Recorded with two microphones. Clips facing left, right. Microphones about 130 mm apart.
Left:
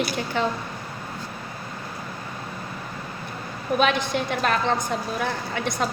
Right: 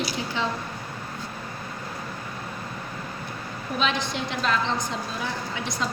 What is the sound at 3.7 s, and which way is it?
A woman's voice, 55° left (ahead or behind).